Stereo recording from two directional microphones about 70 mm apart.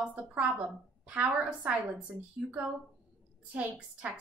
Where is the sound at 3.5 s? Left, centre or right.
Right.